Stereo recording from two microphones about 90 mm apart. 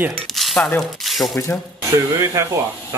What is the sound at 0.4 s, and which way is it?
Dishes, centre (ahead or behind).